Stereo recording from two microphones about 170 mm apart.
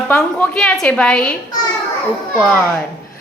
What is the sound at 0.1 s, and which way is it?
A woman's voice, 5° left (ahead or behind).